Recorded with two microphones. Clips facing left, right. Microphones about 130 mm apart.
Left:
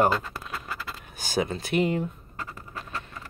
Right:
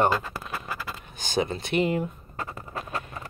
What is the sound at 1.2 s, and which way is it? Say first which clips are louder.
Speech: right 1 dB; 5° left (ahead or behind).